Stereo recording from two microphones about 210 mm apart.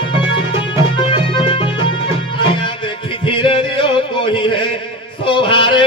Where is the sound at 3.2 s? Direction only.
25° left (ahead or behind).